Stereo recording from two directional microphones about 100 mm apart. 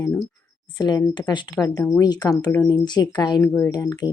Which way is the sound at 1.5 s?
40° left (ahead or behind).